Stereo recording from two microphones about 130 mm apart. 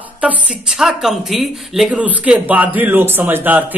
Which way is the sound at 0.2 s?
5° right (ahead or behind).